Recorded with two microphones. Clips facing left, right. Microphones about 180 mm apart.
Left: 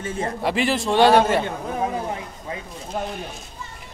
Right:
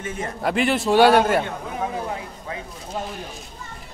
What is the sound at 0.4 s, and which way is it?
Speech, centre (ahead or behind).